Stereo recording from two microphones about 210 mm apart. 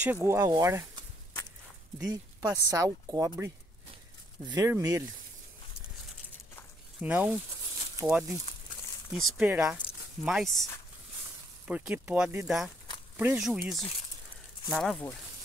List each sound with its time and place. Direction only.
0.0 s speech: 10° right (ahead or behind)
2.0 s speech: 15° right (ahead or behind)
7.0 s speech: 5° right (ahead or behind)